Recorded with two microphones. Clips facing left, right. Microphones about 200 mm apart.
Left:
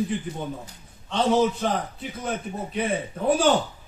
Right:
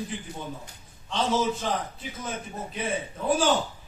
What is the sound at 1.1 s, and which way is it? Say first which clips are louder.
Speech: left 5 dB; 60° left (ahead or behind).